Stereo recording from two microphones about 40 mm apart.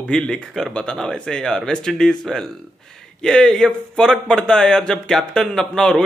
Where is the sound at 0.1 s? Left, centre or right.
Centre.